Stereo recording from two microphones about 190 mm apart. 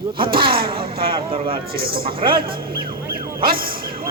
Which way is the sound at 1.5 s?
50° right (ahead or behind).